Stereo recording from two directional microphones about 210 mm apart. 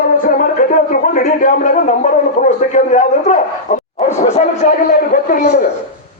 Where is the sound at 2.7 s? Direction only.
35° left (ahead or behind).